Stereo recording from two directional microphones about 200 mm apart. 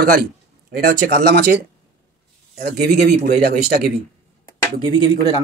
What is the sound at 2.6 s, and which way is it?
Speech, 50° right (ahead or behind).